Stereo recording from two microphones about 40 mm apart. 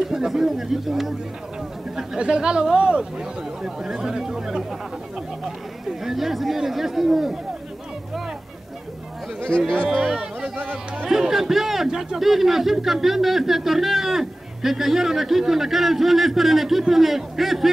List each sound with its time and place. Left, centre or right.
0.0 s a man's voice: centre
2.1 s a man's voice: right
5.9 s a man's voice: centre
10.6 s speech: right
11.1 s a man's voice: centre